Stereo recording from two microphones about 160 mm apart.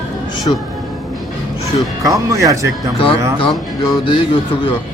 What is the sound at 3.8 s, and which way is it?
Speech, 30° left (ahead or behind).